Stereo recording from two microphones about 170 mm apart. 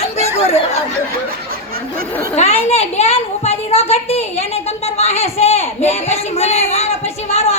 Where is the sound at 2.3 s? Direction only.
40° left (ahead or behind).